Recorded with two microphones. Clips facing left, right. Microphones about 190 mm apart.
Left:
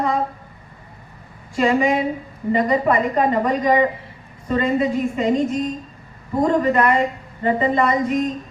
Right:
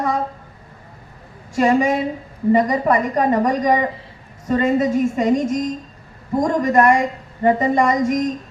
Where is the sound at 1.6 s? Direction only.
40° right (ahead or behind).